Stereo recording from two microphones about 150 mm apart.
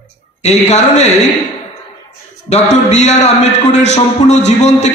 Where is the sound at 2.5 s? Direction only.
50° left (ahead or behind).